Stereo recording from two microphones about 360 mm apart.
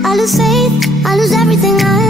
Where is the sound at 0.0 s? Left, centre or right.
Centre.